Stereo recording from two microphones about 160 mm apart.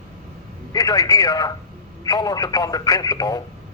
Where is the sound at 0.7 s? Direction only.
25° left (ahead or behind).